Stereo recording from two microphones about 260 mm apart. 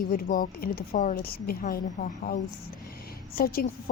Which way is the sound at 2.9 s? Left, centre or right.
Left.